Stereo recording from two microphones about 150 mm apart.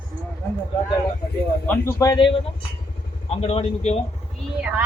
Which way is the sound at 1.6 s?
20° left (ahead or behind).